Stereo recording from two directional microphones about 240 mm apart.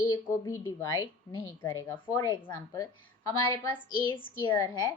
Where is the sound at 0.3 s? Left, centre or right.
Centre.